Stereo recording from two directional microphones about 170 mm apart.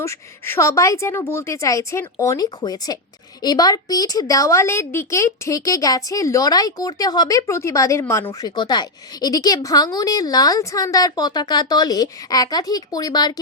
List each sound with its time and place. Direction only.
0.0 s a woman's voice: 15° left (ahead or behind)